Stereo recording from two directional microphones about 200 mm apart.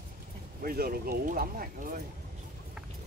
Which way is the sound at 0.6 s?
45° right (ahead or behind).